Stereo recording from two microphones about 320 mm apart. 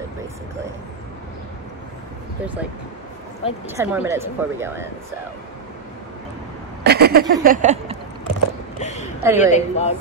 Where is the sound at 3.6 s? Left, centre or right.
Centre.